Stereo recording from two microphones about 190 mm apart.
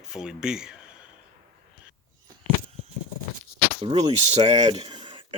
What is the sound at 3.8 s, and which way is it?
Speech, 35° right (ahead or behind).